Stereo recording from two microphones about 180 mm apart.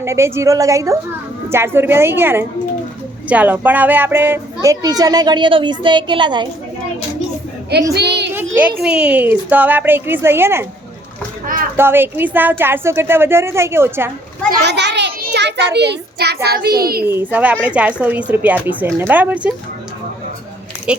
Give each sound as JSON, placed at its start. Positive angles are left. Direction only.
{"t": 0.0, "sound": "speech", "side_deg": -15}
{"t": 7.9, "sound": "a child's voice", "side_deg": -70}
{"t": 8.3, "sound": "child singing", "side_deg": -10}
{"t": 8.8, "sound": "speech", "side_deg": -5}
{"t": 11.8, "sound": "speech", "side_deg": -10}
{"t": 14.6, "sound": "a child's voice", "side_deg": -70}
{"t": 17.1, "sound": "speech", "side_deg": -10}